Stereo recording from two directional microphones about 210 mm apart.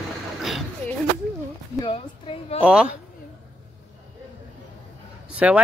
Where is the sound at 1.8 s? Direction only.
25° left (ahead or behind).